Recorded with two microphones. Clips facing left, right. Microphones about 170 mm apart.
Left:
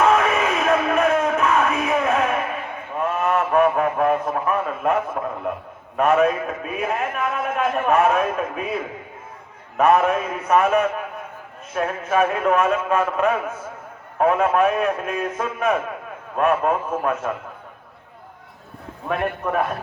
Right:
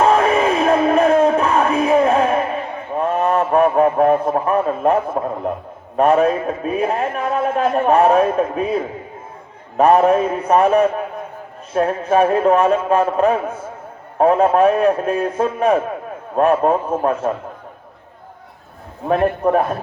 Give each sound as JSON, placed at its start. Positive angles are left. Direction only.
{"t": 0.0, "sound": "music", "side_deg": -30}
{"t": 6.0, "sound": "a man's voice", "side_deg": -30}
{"t": 19.0, "sound": "a man's voice", "side_deg": -35}